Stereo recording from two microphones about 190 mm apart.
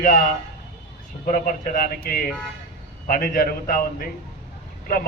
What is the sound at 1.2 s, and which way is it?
A man's voice, 45° left (ahead or behind).